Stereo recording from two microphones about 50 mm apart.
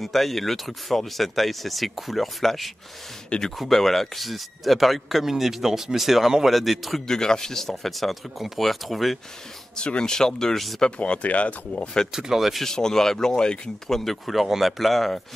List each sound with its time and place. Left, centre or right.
0.0 s a man's voice: centre
3.3 s speech: centre
3.5 s a man's voice: centre
7.1 s a man's voice: centre
9.8 s speech: centre
10.8 s speech: left
12.1 s speech: centre
12.6 s a man's voice: centre